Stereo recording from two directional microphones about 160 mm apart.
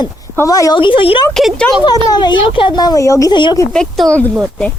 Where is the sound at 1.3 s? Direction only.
5° left (ahead or behind).